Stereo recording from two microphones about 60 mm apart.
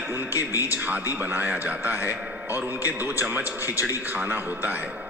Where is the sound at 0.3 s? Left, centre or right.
Left.